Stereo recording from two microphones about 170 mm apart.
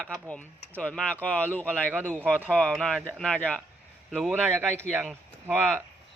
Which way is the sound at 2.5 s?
5° left (ahead or behind).